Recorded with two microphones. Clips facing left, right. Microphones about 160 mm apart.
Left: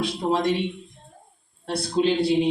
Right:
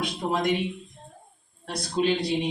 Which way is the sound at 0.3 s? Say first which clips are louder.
Left 3 dB; 30° left (ahead or behind).